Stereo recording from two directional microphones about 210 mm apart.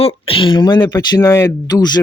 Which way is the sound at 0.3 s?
25° left (ahead or behind).